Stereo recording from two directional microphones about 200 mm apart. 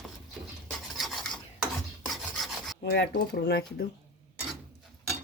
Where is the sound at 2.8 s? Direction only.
55° left (ahead or behind).